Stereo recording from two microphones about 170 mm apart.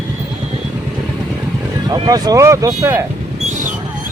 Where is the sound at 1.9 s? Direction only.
20° right (ahead or behind).